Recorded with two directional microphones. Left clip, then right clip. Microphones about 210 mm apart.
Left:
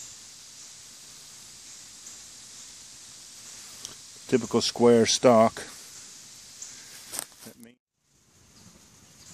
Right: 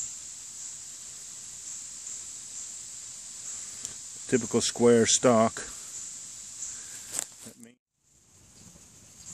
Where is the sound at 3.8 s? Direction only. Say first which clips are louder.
Right 1 dB; 10° left (ahead or behind).